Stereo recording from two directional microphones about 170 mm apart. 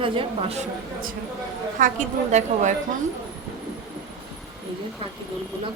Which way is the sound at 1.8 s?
45° right (ahead or behind).